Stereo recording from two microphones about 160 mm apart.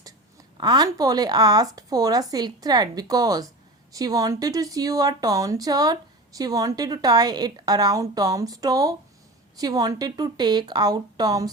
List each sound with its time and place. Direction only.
0.5 s speech: 25° right (ahead or behind)